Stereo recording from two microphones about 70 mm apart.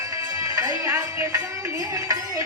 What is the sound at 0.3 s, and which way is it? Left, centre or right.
Music, right.